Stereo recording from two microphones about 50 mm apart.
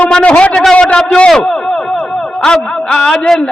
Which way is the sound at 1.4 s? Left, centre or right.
Centre.